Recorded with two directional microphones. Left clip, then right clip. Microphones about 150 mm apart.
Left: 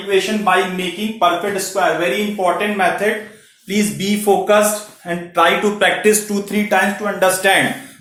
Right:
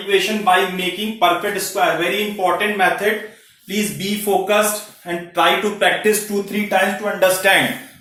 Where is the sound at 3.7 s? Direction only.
90° left.